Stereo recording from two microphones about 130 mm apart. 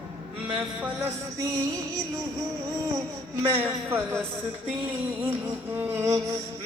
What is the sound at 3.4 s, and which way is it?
Speech, 20° right (ahead or behind).